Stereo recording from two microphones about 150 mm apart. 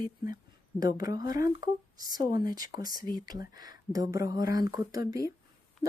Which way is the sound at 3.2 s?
25° right (ahead or behind).